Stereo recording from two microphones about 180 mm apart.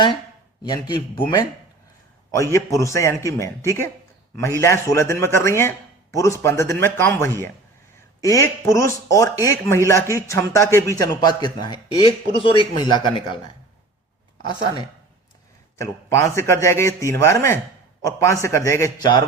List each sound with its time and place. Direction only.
0.7 s speech: 25° left (ahead or behind)
15.8 s speech: 15° left (ahead or behind)